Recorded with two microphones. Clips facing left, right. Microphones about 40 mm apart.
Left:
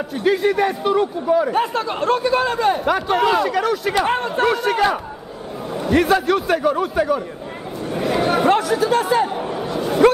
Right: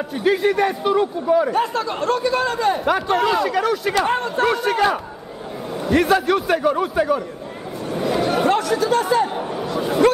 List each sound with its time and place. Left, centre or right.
0.2 s a man's voice: centre
1.5 s speech: centre
2.8 s a man's voice: centre
3.9 s a man's voice: centre
8.4 s speech: centre
9.4 s chatter: centre